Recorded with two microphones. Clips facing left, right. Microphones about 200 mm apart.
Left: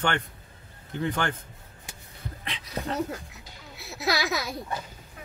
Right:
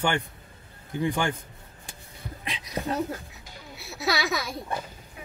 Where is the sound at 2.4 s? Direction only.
15° right (ahead or behind).